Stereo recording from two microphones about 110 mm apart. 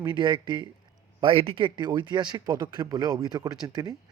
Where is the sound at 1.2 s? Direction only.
55° right (ahead or behind).